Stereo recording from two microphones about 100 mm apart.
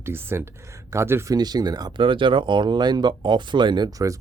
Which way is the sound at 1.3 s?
40° right (ahead or behind).